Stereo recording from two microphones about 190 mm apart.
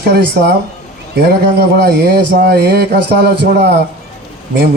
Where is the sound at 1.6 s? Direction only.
55° right (ahead or behind).